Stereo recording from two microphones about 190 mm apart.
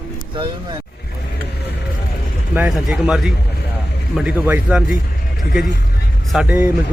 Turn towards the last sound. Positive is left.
turn(degrees=-5)  # may be behind; listen again after turning